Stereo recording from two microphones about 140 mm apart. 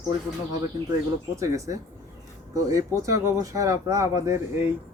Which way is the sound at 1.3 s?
20° right (ahead or behind).